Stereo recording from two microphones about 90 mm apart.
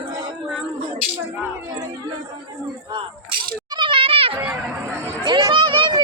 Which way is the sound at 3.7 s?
65° right (ahead or behind).